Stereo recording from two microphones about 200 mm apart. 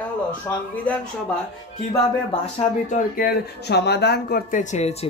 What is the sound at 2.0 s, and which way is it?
Speech, 30° left (ahead or behind).